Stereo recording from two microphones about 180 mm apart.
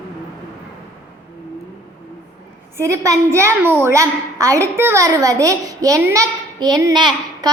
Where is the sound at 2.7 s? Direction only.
15° right (ahead or behind).